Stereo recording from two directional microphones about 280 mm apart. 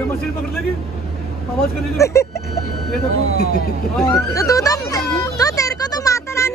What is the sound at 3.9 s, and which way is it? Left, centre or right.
Speech, centre.